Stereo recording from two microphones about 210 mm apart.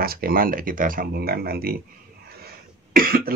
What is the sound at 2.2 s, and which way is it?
Cough, 45° right (ahead or behind).